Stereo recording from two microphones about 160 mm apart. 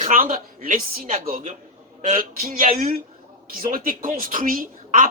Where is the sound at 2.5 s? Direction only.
55° right (ahead or behind).